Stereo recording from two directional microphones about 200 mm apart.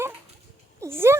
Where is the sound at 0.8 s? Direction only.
10° right (ahead or behind).